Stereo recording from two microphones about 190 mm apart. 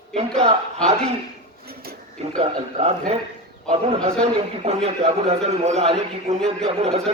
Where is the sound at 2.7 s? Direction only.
35° right (ahead or behind).